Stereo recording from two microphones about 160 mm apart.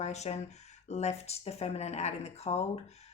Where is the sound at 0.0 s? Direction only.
45° left (ahead or behind).